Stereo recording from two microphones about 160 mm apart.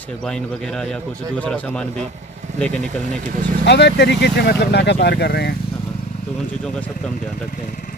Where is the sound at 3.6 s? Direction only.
90° left.